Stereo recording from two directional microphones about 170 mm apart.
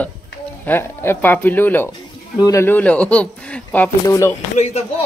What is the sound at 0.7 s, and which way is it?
Speech, 10° left (ahead or behind).